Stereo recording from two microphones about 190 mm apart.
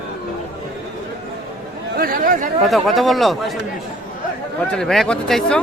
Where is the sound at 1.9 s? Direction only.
50° right (ahead or behind).